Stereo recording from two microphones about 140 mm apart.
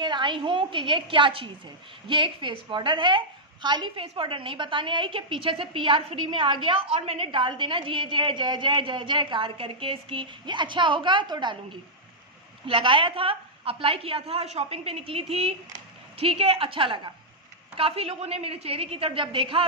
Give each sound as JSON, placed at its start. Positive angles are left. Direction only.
{"t": 0.0, "sound": "a woman's voice", "side_deg": -35}